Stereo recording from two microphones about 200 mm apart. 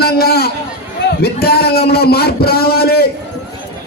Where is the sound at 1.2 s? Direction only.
50° left (ahead or behind).